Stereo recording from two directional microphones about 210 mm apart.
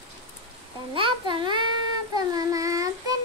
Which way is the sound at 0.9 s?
25° right (ahead or behind).